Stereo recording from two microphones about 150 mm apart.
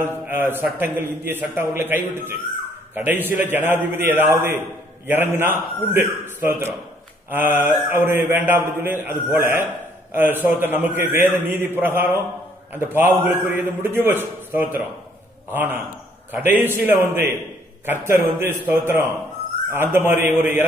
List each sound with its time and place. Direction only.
0.0 s a man's voice: 15° right (ahead or behind)